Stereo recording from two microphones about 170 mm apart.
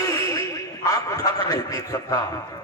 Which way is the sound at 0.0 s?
20° left (ahead or behind).